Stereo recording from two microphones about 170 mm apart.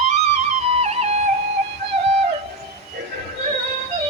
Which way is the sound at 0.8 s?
40° right (ahead or behind).